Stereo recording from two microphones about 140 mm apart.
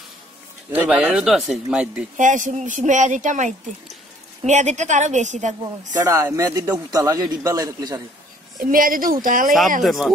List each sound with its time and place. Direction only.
0.7 s speech: 10° right (ahead or behind)
2.1 s a woman's voice: 65° right (ahead or behind)
5.9 s a man's voice: 20° right (ahead or behind)
8.5 s a woman's voice: 75° right (ahead or behind)
9.8 s speech: centre (ahead or behind)